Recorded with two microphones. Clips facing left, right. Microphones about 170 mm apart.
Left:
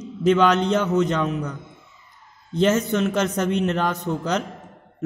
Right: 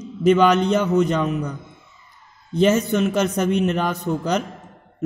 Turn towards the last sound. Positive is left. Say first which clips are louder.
# right 2 dB
turn(degrees=-10)  # may be behind; listen again after turning